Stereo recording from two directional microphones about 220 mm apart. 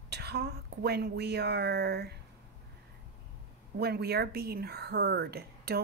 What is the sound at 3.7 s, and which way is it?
Speech, 50° right (ahead or behind).